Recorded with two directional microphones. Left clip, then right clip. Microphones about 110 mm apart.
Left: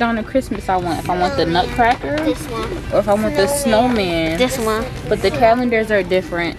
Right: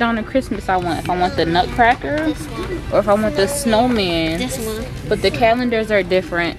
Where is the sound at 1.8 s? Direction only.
5° right (ahead or behind).